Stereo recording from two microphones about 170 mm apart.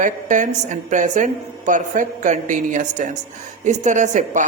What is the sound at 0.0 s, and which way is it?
A woman's voice, 50° right (ahead or behind).